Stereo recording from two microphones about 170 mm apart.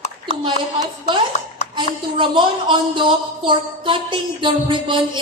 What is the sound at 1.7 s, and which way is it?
A woman's voice, 30° right (ahead or behind).